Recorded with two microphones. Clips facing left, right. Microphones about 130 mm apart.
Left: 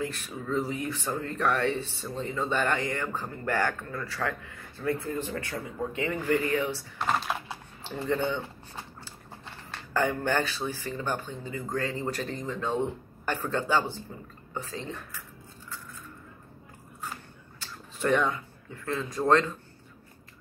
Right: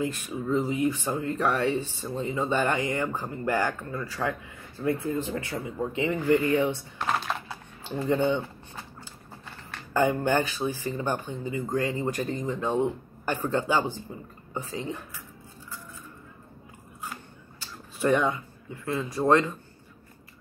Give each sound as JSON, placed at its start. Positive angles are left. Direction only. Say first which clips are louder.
{"t": 0.0, "sound": "speech", "louder": "right 4 dB", "side_deg": -15}
{"t": 6.4, "sound": "speech", "louder": "right 4 dB", "side_deg": -25}
{"t": 7.1, "sound": "typing", "louder": "even", "side_deg": 0}
{"t": 7.9, "sound": "speech", "louder": "right 4 dB", "side_deg": -15}
{"t": 9.9, "sound": "speech", "louder": "right 3 dB", "side_deg": -15}
{"t": 17.9, "sound": "speech", "louder": "right 2 dB", "side_deg": -10}